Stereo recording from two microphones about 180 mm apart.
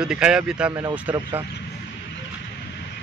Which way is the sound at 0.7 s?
20° right (ahead or behind).